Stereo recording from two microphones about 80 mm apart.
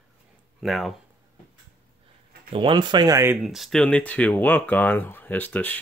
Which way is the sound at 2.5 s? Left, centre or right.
Right.